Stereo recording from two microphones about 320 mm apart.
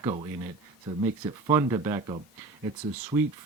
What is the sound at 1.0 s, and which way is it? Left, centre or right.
Speech, centre.